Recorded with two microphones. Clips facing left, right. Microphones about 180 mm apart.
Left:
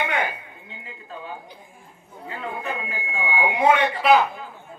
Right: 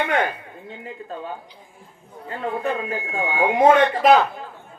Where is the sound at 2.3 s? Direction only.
40° right (ahead or behind).